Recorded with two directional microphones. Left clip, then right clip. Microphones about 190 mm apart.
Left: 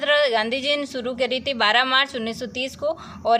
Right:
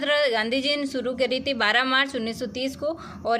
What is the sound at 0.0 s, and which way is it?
A woman's voice, 15° right (ahead or behind).